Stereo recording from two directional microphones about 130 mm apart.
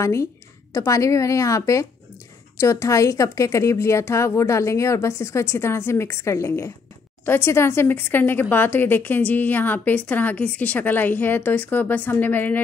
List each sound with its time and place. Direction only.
0.0 s a woman's voice: 25° left (ahead or behind)